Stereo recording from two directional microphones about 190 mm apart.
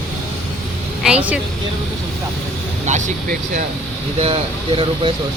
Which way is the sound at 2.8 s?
40° right (ahead or behind).